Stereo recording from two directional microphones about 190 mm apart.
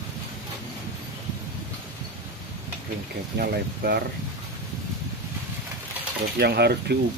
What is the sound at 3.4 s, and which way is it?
Speech, 60° right (ahead or behind).